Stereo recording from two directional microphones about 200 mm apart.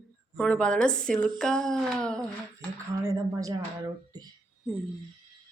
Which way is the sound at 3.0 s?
15° right (ahead or behind).